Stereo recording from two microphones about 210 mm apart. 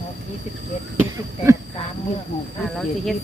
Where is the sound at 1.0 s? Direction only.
15° right (ahead or behind).